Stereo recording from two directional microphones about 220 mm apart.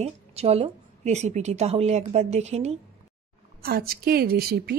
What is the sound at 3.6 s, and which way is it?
A woman's voice, 45° right (ahead or behind).